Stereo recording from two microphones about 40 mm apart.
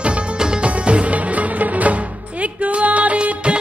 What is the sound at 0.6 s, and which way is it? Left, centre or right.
Music, right.